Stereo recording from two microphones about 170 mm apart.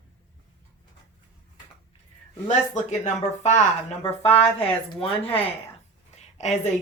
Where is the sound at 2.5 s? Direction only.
45° left (ahead or behind).